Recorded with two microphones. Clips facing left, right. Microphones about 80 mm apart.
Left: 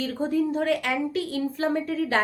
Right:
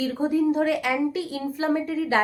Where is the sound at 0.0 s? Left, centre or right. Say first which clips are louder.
Right 3 dB; centre.